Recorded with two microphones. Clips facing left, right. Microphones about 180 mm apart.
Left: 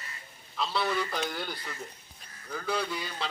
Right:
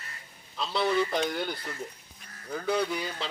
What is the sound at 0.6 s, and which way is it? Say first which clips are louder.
Speech: right 3 dB; 25° right (ahead or behind).